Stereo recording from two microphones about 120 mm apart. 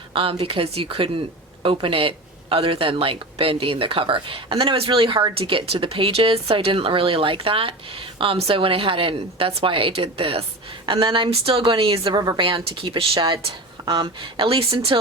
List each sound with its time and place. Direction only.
0.1 s speech: 50° right (ahead or behind)
12.1 s speech: 35° right (ahead or behind)
13.8 s speech: 30° right (ahead or behind)
14.3 s speech: 45° right (ahead or behind)